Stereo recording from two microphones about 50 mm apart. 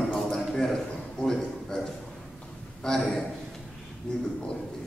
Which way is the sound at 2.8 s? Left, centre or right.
Centre.